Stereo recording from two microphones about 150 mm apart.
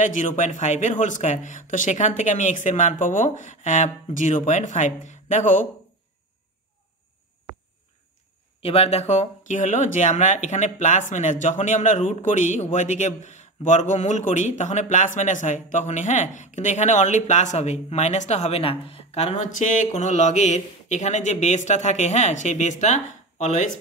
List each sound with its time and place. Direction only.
0.0 s speech: 55° left (ahead or behind)
8.6 s speech: 40° left (ahead or behind)